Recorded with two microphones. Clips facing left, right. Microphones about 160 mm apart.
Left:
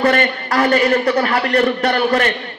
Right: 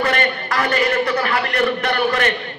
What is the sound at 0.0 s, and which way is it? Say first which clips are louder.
A man's voice: left 4 dB; 35° left (ahead or behind).